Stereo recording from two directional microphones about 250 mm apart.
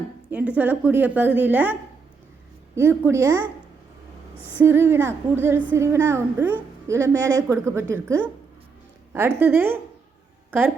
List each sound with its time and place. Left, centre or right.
0.3 s a woman's voice: centre
2.7 s a woman's voice: centre
4.6 s a woman's voice: centre